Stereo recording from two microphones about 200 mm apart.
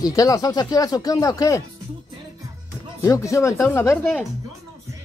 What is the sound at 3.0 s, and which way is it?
Speech, 15° left (ahead or behind).